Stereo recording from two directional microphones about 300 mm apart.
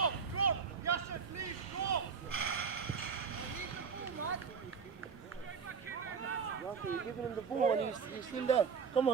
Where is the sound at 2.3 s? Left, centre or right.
Right.